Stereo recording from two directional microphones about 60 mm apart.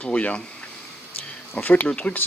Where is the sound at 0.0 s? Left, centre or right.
Left.